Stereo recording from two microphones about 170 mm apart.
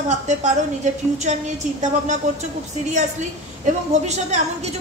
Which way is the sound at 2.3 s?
45° right (ahead or behind).